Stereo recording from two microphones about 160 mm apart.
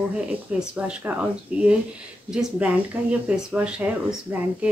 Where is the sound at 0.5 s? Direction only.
5° right (ahead or behind).